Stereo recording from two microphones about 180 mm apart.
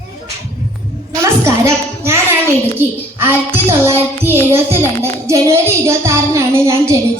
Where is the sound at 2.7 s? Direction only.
10° right (ahead or behind).